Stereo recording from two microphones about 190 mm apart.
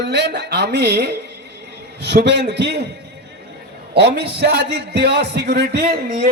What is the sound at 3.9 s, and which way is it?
A man's voice, 60° right (ahead or behind).